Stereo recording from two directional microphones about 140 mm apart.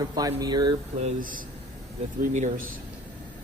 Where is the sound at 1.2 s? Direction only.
75° right (ahead or behind).